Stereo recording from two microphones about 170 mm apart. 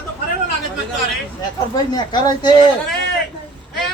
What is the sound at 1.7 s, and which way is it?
Speech, 25° left (ahead or behind).